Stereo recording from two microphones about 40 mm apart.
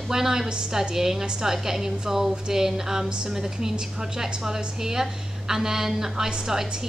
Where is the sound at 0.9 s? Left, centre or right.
Centre.